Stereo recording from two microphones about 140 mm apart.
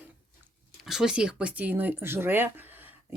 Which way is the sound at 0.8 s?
5° right (ahead or behind).